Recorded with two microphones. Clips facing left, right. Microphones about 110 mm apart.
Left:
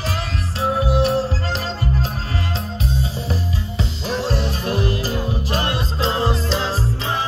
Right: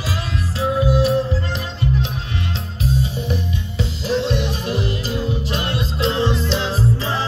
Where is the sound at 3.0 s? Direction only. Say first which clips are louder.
Right 1 dB; 35° left (ahead or behind).